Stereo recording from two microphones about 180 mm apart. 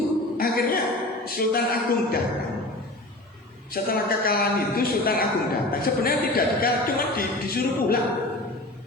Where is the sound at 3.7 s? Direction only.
55° left (ahead or behind).